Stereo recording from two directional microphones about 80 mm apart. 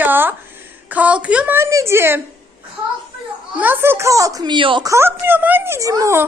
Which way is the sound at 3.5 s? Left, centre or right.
Right.